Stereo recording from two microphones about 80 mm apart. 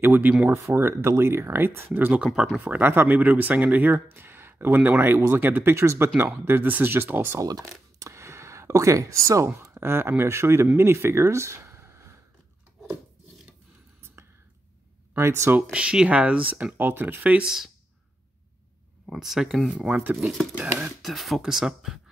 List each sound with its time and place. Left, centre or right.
0.0 s speech: right
0.7 s speech: right
2.1 s speech: centre
2.7 s speech: right
7.3 s speech: right
9.5 s speech: right
10.8 s a sound: right
15.1 s speech: right
15.7 s speech: centre
19.0 s speech: centre
20.2 s speech: right
21.0 s speech: centre